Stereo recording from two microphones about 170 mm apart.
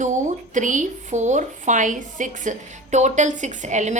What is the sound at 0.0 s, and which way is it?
Speech, 45° right (ahead or behind).